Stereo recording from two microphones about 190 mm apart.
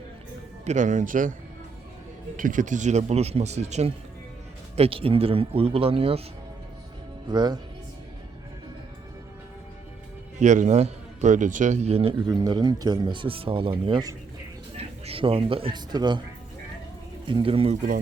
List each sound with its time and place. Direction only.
0.6 s speech: 40° right (ahead or behind)
2.3 s speech: 45° right (ahead or behind)
7.3 s speech: 20° right (ahead or behind)
10.4 s a man's voice: 40° right (ahead or behind); by 16.2 s 25° right (ahead or behind)
17.2 s speech: 25° right (ahead or behind)